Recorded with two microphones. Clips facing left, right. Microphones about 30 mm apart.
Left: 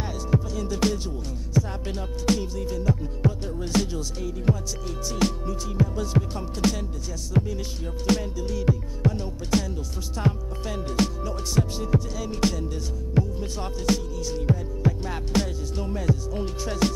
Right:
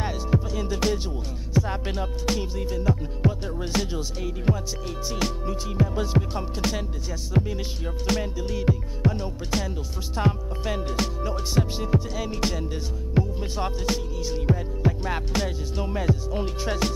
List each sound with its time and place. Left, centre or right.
0.0 s music: right
6.6 s music: centre
8.5 s music: centre
10.2 s speech: centre
11.2 s music: right
12.3 s music: centre
12.5 s music: right
16.8 s music: centre